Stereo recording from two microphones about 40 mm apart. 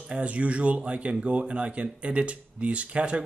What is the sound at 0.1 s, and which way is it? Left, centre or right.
Speech, right.